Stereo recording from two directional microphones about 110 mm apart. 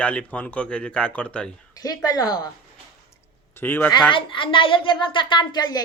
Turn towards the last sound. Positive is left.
turn(degrees=40)  # may be behind; listen again after turning